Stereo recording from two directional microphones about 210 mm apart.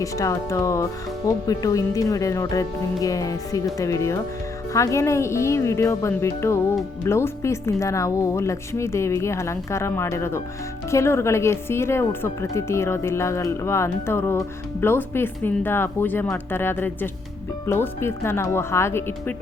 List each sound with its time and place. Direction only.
0.0 s speech: 15° left (ahead or behind)